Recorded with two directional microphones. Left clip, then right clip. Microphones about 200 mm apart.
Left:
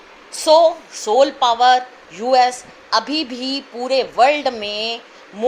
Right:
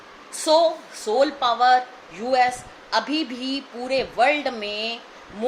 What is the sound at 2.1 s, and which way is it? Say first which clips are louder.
A woman's voice: left 6 dB; 25° left (ahead or behind).